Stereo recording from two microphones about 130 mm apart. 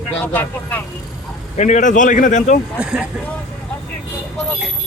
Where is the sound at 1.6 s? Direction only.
70° left (ahead or behind).